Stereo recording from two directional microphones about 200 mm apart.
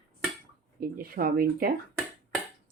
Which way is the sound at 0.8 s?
45° right (ahead or behind).